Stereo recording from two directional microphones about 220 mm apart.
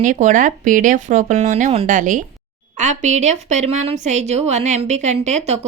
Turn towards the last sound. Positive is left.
turn(degrees=-30)  # may be behind; listen again after turning